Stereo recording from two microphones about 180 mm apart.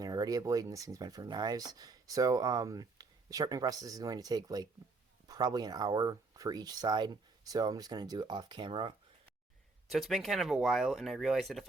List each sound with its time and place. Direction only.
0.0 s speech: 20° right (ahead or behind)
9.9 s speech: centre (ahead or behind)